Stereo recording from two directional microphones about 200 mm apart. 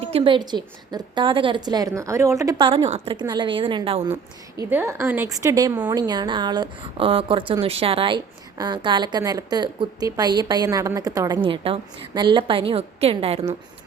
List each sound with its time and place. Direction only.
0.0 s a woman's voice: 30° right (ahead or behind)
4.1 s a woman's voice: 10° right (ahead or behind); by 13.4 s 30° right (ahead or behind)